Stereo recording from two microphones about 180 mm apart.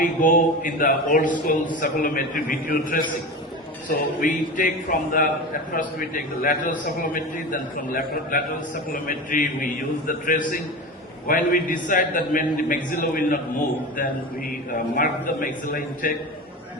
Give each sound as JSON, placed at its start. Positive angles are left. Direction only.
{"t": 0.0, "sound": "a man's voice", "side_deg": 45}
{"t": 14.9, "sound": "a man's voice", "side_deg": 50}